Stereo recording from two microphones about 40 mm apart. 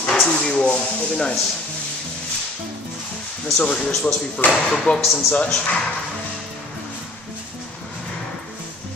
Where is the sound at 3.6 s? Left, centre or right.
Centre.